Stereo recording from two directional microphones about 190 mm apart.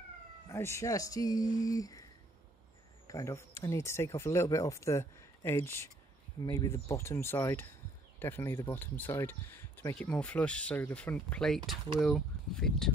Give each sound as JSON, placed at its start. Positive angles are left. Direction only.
{"t": 0.5, "sound": "speech", "side_deg": 15}
{"t": 3.1, "sound": "speech", "side_deg": 15}